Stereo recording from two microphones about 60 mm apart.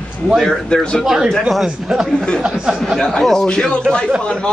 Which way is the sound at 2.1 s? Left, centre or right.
Centre.